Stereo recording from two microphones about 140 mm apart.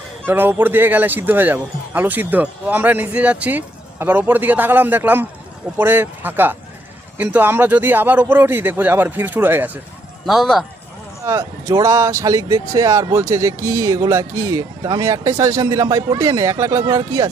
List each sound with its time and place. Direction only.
0.3 s speech: 15° right (ahead or behind)
10.2 s speech: centre (ahead or behind)
11.2 s speech: 20° right (ahead or behind)